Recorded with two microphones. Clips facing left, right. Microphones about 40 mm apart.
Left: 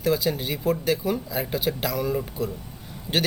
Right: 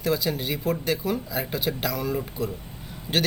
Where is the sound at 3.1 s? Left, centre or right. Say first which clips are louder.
Even; right.